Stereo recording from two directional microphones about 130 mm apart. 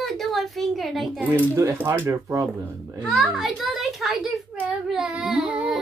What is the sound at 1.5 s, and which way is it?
Speech, 20° right (ahead or behind).